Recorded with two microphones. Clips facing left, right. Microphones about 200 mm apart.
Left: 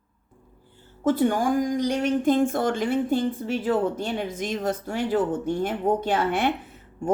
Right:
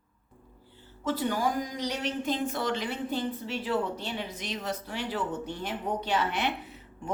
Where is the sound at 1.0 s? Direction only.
50° left (ahead or behind).